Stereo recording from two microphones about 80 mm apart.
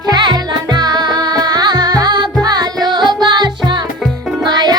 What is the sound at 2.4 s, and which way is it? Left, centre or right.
Music, right.